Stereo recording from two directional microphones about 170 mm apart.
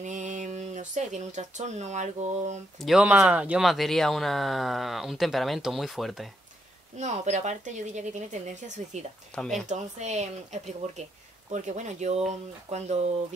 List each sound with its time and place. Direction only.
0.0 s speech: 45° right (ahead or behind)
2.8 s speech: 5° right (ahead or behind)
7.0 s speech: 45° right (ahead or behind)
9.3 s speech: 5° left (ahead or behind)
9.7 s speech: 40° right (ahead or behind)